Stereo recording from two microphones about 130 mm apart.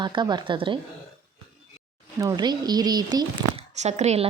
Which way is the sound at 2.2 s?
30° right (ahead or behind).